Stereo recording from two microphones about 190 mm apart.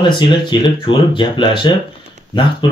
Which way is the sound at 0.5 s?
25° left (ahead or behind).